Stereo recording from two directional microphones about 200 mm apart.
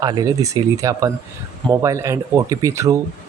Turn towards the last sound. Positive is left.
turn(degrees=-15)  # may be behind; listen again after turning